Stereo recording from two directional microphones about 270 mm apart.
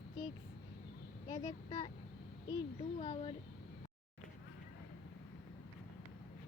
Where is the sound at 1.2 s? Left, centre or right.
Centre.